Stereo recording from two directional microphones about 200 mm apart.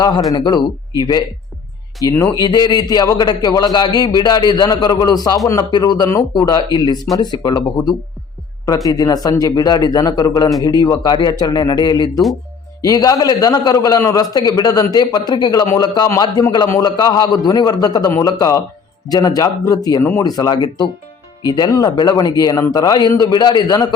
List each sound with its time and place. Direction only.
0.0 s a man's voice: 20° left (ahead or behind)